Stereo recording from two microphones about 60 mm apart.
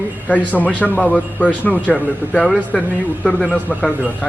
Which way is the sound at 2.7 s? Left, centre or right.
Centre.